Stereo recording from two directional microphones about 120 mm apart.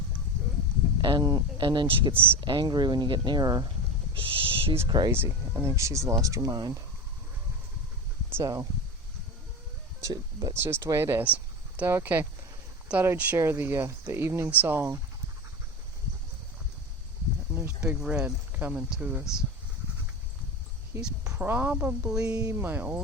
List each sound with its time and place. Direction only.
1.0 s speech: 35° right (ahead or behind)
4.4 s a sound: 50° right (ahead or behind)
4.9 s speech: 35° right (ahead or behind)
5.1 s speech: 20° right (ahead or behind)
8.3 s speech: 20° right (ahead or behind)
10.0 s speech: 30° right (ahead or behind)
17.5 s a sound: 20° right (ahead or behind)
18.0 s speech: 10° right (ahead or behind)
21.0 s speech: 5° right (ahead or behind)